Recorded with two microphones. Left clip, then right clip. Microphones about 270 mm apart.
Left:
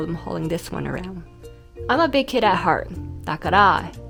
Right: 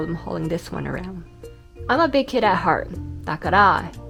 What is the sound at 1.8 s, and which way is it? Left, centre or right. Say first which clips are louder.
Speech: even; centre.